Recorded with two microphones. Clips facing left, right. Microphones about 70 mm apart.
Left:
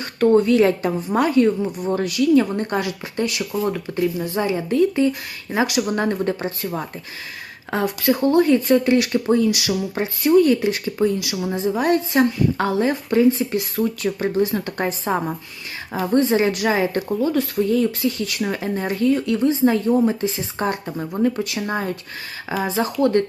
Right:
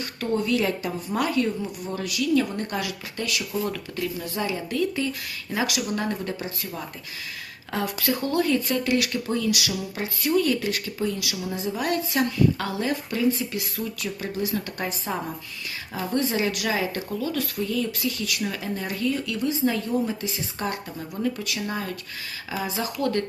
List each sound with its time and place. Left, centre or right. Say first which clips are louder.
0.0 s speech: left 11 dB; left
5.8 s speech: left 7 dB; left